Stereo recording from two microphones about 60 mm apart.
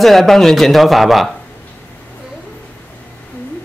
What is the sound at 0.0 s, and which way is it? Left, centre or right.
Speech, centre.